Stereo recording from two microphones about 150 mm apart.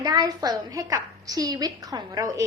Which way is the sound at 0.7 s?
20° right (ahead or behind).